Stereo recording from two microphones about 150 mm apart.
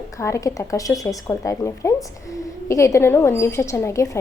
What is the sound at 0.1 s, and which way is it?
A woman's voice, 20° left (ahead or behind).